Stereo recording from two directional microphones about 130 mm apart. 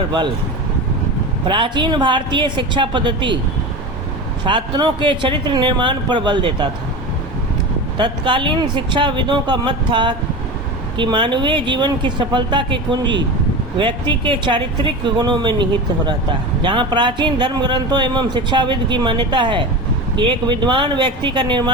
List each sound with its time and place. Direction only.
1.5 s a man's voice: 35° right (ahead or behind)
4.4 s a man's voice: 35° right (ahead or behind)
7.9 s a man's voice: 40° right (ahead or behind)
16.6 s a man's voice: 35° right (ahead or behind)